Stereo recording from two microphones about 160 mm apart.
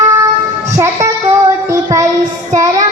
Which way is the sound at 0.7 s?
20° right (ahead or behind).